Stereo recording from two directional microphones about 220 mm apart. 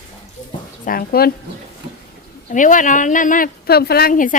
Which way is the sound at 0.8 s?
40° left (ahead or behind).